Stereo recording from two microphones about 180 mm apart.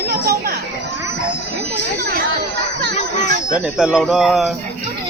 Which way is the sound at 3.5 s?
5° right (ahead or behind).